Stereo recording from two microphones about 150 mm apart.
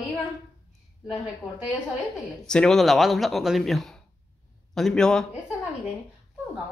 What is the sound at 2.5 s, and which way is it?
Speech, 5° left (ahead or behind).